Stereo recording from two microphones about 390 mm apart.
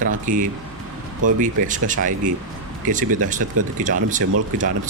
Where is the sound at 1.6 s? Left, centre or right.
Centre.